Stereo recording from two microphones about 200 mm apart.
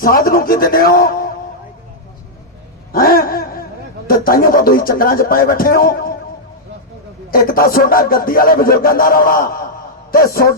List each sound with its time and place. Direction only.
0.0 s speech: 45° left (ahead or behind)
2.9 s speech: 45° left (ahead or behind)
7.3 s speech: 50° left (ahead or behind)